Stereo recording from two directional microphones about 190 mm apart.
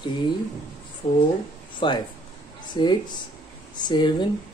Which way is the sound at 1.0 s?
40° left (ahead or behind).